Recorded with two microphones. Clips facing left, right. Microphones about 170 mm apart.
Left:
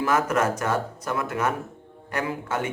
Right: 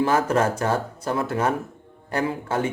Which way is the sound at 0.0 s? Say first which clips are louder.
Right 2 dB; 30° right (ahead or behind).